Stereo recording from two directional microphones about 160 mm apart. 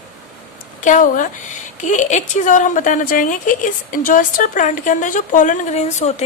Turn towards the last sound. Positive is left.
turn(degrees=45)  # may be behind; listen again after turning